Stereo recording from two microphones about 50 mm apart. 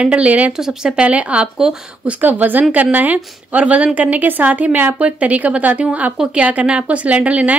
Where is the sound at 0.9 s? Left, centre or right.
Right.